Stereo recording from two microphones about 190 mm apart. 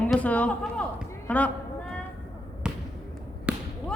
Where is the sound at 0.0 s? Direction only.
5° left (ahead or behind).